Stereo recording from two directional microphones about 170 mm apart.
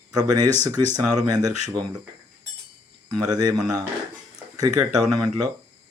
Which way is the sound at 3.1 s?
25° right (ahead or behind).